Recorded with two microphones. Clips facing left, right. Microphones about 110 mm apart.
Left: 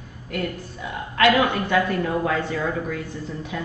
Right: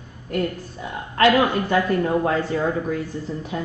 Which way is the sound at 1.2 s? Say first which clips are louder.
Right 1 dB; 35° right (ahead or behind).